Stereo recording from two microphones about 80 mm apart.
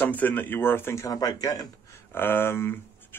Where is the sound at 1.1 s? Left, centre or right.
Left.